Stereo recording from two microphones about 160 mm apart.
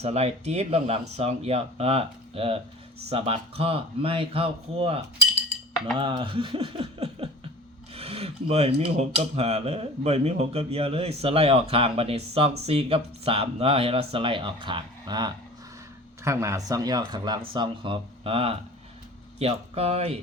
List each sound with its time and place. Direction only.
0.0 s speech: 40° right (ahead or behind)
6.0 s speech: 30° right (ahead or behind)